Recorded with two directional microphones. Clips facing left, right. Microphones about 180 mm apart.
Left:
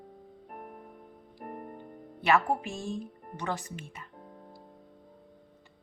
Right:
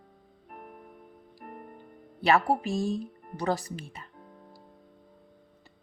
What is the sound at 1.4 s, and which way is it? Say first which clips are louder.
Music: left 4 dB; 35° left (ahead or behind).